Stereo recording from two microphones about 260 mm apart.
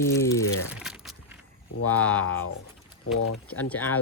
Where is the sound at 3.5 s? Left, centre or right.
Centre.